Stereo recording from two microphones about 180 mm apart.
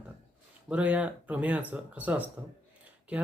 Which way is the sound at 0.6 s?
5° right (ahead or behind).